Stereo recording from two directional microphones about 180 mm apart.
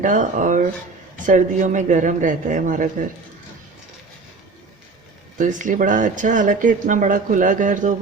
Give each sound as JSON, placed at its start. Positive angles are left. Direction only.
{"t": 0.0, "sound": "speech", "side_deg": -45}
{"t": 5.4, "sound": "speech", "side_deg": -45}